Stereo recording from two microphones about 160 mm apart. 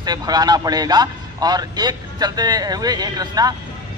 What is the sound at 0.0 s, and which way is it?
Speech, 25° right (ahead or behind).